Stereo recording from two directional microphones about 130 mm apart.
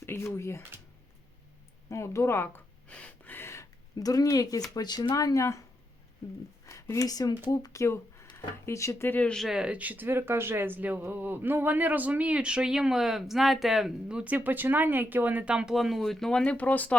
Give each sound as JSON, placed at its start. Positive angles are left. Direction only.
{"t": 0.0, "sound": "speech", "side_deg": 20}
{"t": 1.9, "sound": "speech", "side_deg": 20}
{"t": 2.9, "sound": "a sound", "side_deg": 10}
{"t": 4.7, "sound": "speech", "side_deg": 30}
{"t": 6.7, "sound": "speech", "side_deg": 25}